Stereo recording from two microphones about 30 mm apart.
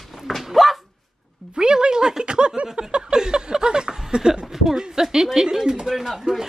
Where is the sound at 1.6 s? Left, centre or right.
Right.